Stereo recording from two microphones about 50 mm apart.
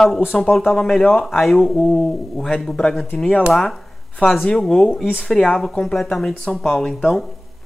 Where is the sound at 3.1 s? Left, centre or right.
Left.